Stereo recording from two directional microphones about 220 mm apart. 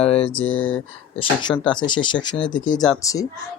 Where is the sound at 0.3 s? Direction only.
65° left (ahead or behind).